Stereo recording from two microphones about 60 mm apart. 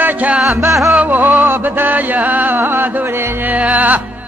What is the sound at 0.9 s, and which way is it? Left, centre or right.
Music, right.